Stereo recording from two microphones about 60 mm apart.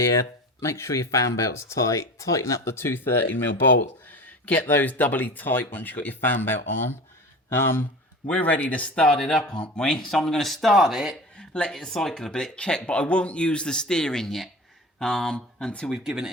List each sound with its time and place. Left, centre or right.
0.6 s speech: left
2.9 s speech: left
8.3 s speech: left; by 11.2 s centre
11.3 s speech: centre
15.9 s speech: centre